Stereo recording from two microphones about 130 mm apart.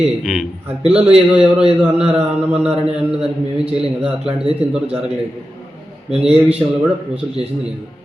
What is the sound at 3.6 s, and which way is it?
Speech, 50° right (ahead or behind).